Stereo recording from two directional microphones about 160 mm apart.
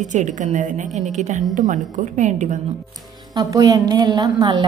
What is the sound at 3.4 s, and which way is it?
A woman's voice, 20° right (ahead or behind).